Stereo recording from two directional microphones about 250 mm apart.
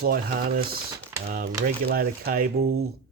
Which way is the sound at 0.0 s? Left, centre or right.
Right.